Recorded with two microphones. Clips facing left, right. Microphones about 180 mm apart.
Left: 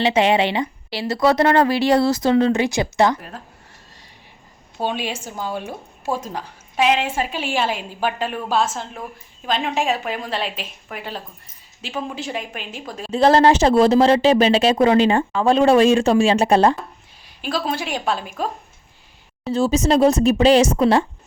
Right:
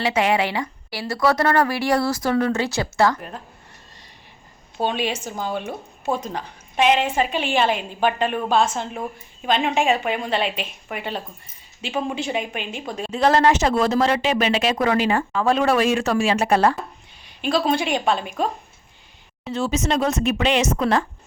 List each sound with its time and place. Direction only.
0.0 s speech: 25° left (ahead or behind)
4.8 s a woman's voice: 5° left (ahead or behind)
13.1 s speech: 30° left (ahead or behind)
17.2 s a woman's voice: 5° left (ahead or behind)
19.5 s speech: 35° left (ahead or behind)